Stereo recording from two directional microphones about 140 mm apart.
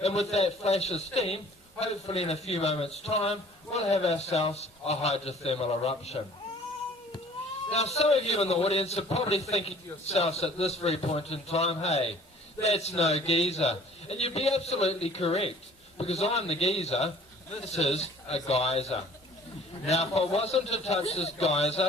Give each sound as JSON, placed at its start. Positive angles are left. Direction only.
{"t": 0.0, "sound": "a man's voice", "side_deg": 50}
{"t": 7.7, "sound": "a man's voice", "side_deg": 50}